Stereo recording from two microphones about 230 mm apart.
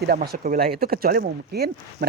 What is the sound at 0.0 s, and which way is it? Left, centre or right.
A man's voice, right.